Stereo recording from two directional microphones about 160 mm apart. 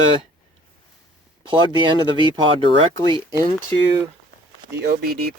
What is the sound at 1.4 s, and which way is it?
Speech, 30° right (ahead or behind).